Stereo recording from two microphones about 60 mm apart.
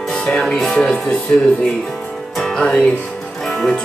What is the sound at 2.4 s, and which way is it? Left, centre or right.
Music, centre.